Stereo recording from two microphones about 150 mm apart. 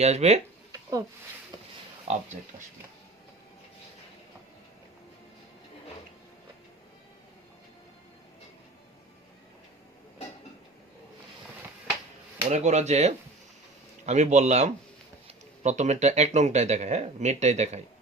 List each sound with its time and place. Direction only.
0.0 s speech: 45° right (ahead or behind)
0.7 s a sound: 20° right (ahead or behind)
2.1 s speech: 50° right (ahead or behind)
12.5 s speech: 50° right (ahead or behind)